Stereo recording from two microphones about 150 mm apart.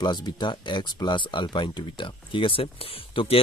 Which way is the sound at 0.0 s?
30° left (ahead or behind).